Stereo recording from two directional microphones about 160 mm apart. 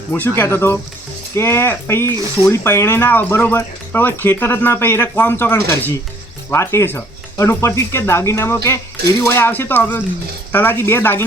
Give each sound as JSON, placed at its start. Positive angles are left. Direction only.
{"t": 0.1, "sound": "speech", "side_deg": 10}